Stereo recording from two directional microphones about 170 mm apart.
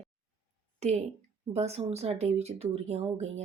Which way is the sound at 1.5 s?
40° right (ahead or behind).